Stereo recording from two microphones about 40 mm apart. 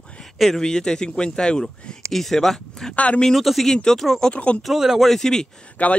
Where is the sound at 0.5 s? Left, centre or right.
Centre.